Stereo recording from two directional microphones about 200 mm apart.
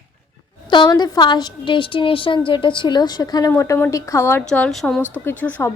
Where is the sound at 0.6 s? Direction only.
25° left (ahead or behind).